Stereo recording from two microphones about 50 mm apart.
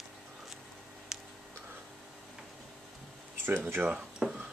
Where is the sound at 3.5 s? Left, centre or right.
Right.